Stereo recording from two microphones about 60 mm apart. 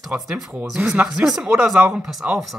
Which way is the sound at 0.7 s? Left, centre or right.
Right.